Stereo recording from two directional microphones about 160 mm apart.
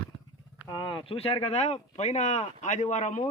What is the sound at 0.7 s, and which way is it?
Speech, 25° left (ahead or behind).